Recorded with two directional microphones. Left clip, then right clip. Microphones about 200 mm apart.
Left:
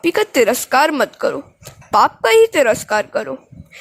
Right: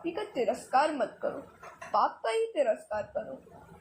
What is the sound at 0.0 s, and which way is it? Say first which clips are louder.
A woman's voice: left 17 dB; 60° left (ahead or behind).